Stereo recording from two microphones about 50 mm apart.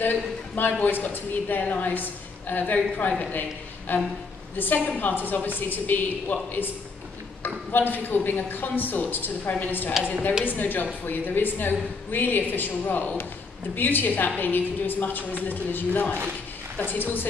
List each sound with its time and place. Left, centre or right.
0.0 s a woman's voice: left
7.4 s a woman's voice: left